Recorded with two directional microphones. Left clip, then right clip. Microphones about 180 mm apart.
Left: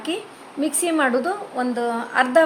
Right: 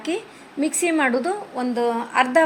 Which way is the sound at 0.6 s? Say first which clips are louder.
Even; 10° right (ahead or behind).